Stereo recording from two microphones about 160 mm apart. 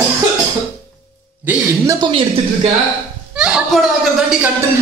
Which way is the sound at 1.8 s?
30° right (ahead or behind).